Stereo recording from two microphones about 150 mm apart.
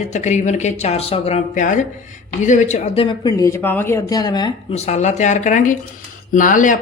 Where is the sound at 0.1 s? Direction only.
50° left (ahead or behind); by 4.5 s 30° left (ahead or behind).